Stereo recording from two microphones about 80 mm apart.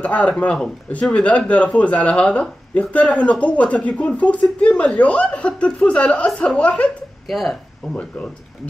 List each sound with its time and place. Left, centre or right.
0.0 s speech: centre
7.2 s speech: centre
7.9 s speech: centre